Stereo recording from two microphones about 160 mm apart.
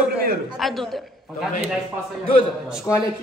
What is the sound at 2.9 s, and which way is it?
Speech, 15° left (ahead or behind).